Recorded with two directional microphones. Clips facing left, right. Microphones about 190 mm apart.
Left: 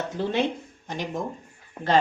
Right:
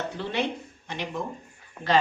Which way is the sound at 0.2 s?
45° left (ahead or behind).